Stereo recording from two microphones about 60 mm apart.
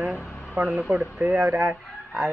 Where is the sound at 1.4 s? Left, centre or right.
Right.